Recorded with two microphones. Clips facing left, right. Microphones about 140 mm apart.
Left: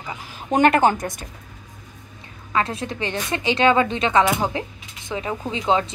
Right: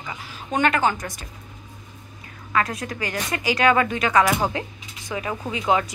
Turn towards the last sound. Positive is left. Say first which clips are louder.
# left 1 dB
turn(degrees=25)  # may be behind; listen again after turning